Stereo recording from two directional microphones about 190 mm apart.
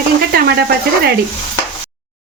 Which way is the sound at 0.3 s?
55° right (ahead or behind).